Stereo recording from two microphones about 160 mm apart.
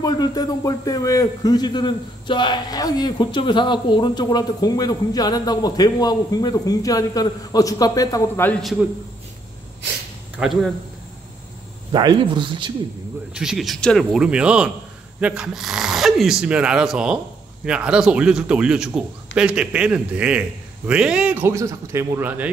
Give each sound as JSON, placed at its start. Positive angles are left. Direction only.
{"t": 0.0, "sound": "speech", "side_deg": 25}
{"t": 10.4, "sound": "speech", "side_deg": 0}
{"t": 11.9, "sound": "speech", "side_deg": -25}
{"t": 13.4, "sound": "a man's voice", "side_deg": 0}